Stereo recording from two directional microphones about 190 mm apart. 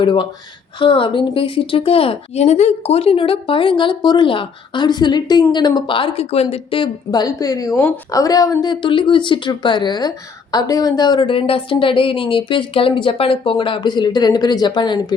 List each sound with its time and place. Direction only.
0.0 s a woman's voice: 25° left (ahead or behind)